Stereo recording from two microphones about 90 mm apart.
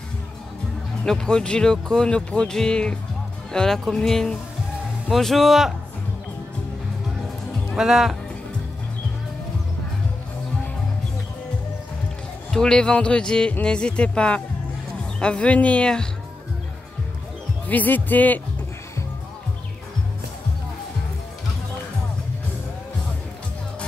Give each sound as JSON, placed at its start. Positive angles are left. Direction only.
{"t": 1.0, "sound": "speech", "side_deg": 5}
{"t": 7.7, "sound": "speech", "side_deg": -5}
{"t": 12.4, "sound": "speech", "side_deg": 5}
{"t": 17.6, "sound": "speech", "side_deg": 20}